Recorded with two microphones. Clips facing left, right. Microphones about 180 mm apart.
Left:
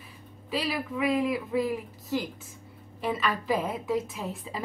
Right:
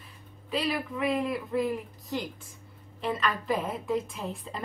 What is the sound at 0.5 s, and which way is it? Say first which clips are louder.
A woman's voice: even; centre (ahead or behind).